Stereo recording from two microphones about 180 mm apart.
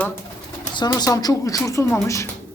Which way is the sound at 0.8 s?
20° left (ahead or behind).